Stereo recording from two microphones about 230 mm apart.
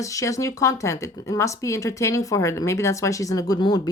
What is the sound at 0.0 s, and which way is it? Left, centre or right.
Speech, centre.